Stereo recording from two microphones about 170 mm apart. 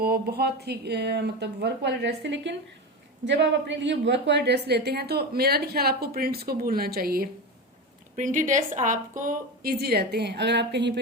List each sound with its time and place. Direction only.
0.0 s a woman's voice: 65° right (ahead or behind)
8.1 s a woman's voice: 50° right (ahead or behind); by 10.9 s 90° right